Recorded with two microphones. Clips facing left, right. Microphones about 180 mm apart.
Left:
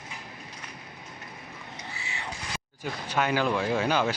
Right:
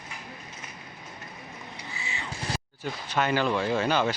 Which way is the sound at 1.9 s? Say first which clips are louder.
Right 2 dB; 65° left (ahead or behind).